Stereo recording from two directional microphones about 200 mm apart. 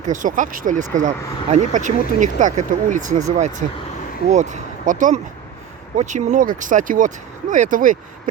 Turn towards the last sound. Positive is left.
turn(degrees=-40)  # may be behind; listen again after turning